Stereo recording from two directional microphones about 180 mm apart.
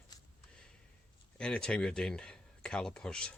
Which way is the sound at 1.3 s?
5° left (ahead or behind).